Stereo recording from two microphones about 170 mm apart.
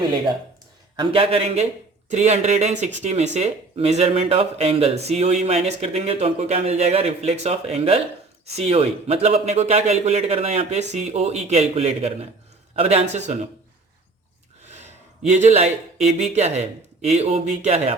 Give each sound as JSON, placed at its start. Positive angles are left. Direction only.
{"t": 0.9, "sound": "speech", "side_deg": -35}
{"t": 14.7, "sound": "a sound", "side_deg": -40}
{"t": 15.3, "sound": "speech", "side_deg": -45}